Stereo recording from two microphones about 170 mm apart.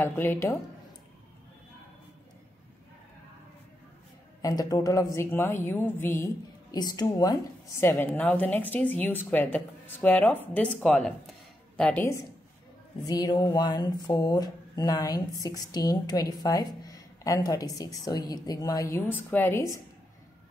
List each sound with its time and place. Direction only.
0.0 s a woman's voice: 15° left (ahead or behind)
4.4 s a woman's voice: 20° left (ahead or behind)
6.7 s a woman's voice: 25° left (ahead or behind)
13.0 s a woman's voice: 25° left (ahead or behind)